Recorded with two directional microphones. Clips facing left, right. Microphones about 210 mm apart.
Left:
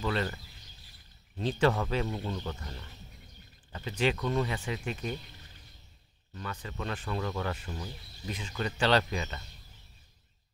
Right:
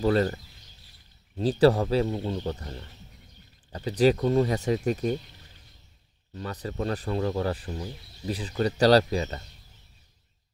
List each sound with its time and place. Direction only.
0.0 s speech: 40° right (ahead or behind)
1.4 s speech: 35° right (ahead or behind)
6.3 s speech: 35° right (ahead or behind)